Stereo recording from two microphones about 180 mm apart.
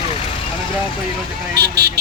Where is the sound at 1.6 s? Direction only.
65° right (ahead or behind).